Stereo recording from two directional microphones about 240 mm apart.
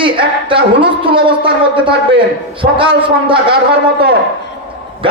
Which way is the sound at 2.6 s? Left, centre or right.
Right.